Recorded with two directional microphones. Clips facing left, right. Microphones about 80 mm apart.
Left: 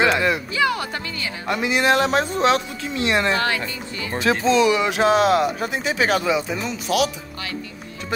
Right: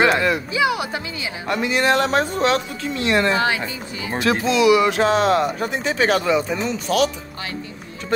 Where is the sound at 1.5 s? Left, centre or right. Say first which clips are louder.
Even; centre.